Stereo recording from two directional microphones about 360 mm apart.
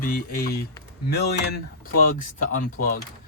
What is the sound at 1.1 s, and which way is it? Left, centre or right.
Speech, left.